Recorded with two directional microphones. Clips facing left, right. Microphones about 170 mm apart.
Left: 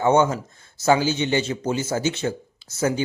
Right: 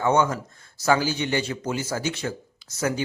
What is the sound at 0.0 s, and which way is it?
Speech, 25° left (ahead or behind).